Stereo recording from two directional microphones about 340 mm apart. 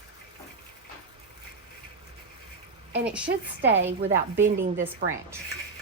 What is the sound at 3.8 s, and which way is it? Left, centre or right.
Speech, right.